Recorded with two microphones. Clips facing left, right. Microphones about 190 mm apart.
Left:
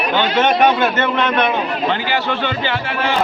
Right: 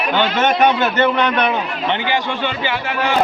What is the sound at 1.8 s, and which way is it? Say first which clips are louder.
Speech: right 2 dB; 20° right (ahead or behind).